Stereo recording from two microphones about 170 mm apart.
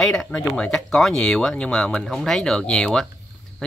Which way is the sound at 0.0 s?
5° left (ahead or behind).